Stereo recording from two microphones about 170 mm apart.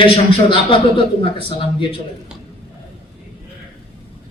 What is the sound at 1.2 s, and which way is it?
Speech, 30° left (ahead or behind).